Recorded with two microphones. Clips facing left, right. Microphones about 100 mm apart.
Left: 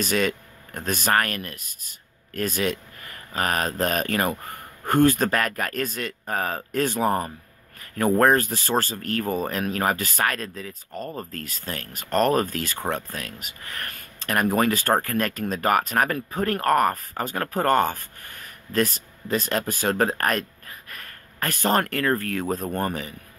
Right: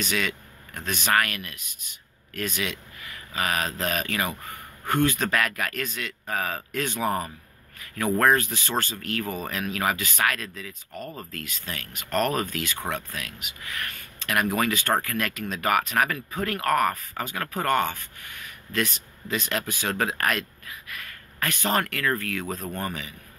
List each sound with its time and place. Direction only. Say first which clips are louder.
0.0 s speech: left 5 dB; 40° left (ahead or behind)